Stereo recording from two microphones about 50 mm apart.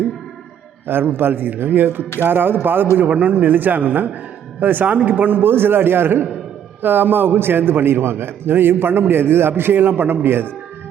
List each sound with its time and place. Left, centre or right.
0.9 s a man's voice: right